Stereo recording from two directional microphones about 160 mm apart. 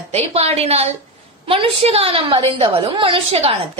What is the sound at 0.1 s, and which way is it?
A woman's voice, 40° right (ahead or behind).